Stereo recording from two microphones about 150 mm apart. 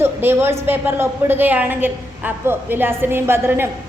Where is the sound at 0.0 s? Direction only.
15° right (ahead or behind).